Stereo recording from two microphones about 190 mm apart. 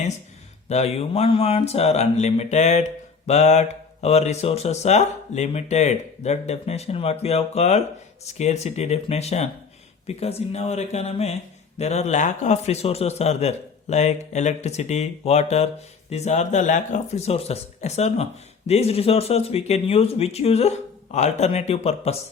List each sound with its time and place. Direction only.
0.7 s a man's voice: 35° left (ahead or behind)